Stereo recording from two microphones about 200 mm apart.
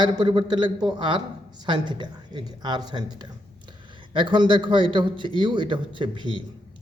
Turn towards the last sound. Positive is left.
turn(degrees=-25)  # may be behind; listen again after turning